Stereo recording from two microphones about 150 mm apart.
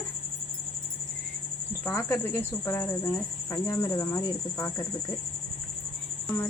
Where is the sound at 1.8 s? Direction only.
15° left (ahead or behind).